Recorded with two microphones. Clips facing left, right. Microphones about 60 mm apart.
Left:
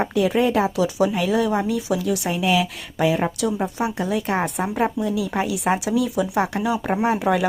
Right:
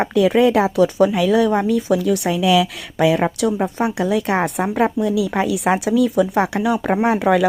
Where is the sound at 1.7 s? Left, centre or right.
Right.